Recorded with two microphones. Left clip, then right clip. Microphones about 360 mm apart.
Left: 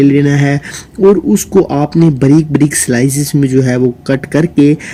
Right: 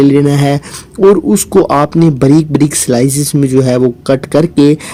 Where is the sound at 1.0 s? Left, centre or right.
Right.